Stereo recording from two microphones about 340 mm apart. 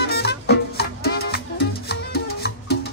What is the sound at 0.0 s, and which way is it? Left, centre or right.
Music, left.